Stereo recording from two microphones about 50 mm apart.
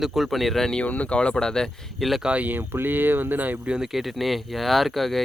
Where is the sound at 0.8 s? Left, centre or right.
Left; by 1.6 s centre.